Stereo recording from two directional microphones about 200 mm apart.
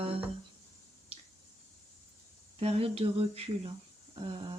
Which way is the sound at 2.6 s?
30° right (ahead or behind).